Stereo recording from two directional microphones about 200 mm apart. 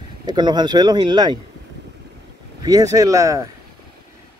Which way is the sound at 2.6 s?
15° right (ahead or behind).